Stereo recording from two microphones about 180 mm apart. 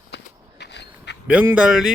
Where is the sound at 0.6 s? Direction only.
75° left (ahead or behind).